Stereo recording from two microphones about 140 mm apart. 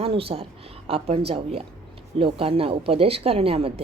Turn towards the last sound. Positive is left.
turn(degrees=-45)  # may be behind; listen again after turning